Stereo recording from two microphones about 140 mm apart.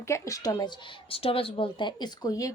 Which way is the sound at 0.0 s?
20° left (ahead or behind).